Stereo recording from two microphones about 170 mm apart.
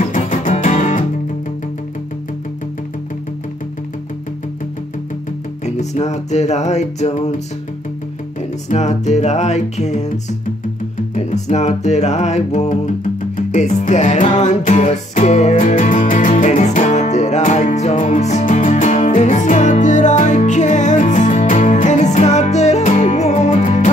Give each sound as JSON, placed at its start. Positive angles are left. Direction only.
{"t": 0.0, "sound": "music", "side_deg": 50}
{"t": 5.8, "sound": "music", "side_deg": 40}
{"t": 8.6, "sound": "music", "side_deg": 40}
{"t": 11.1, "sound": "music", "side_deg": 40}